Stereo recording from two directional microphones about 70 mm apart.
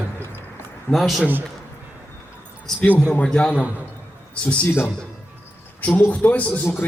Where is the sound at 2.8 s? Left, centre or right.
Centre.